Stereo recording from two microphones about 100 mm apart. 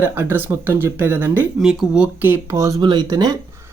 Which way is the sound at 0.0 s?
25° right (ahead or behind).